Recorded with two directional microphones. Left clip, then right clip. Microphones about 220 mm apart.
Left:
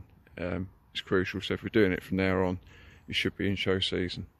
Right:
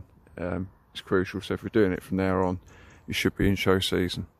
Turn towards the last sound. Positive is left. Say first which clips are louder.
# right 4 dB
turn(degrees=-15)  # may be behind; listen again after turning